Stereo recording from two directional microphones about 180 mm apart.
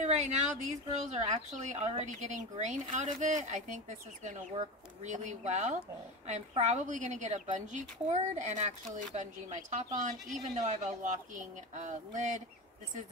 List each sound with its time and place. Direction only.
0.0 s a woman's voice: 40° right (ahead or behind)